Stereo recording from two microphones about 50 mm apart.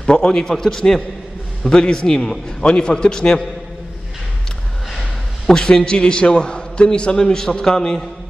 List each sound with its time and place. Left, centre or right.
0.0 s a man's voice: centre
5.5 s a man's voice: centre